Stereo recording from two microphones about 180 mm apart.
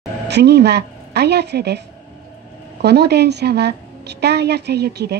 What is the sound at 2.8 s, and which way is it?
A woman's voice, 65° right (ahead or behind).